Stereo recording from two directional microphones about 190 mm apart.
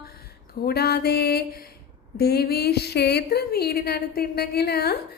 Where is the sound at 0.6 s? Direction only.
55° left (ahead or behind).